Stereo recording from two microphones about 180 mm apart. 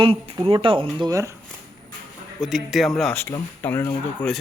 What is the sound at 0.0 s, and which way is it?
Speech, 30° right (ahead or behind).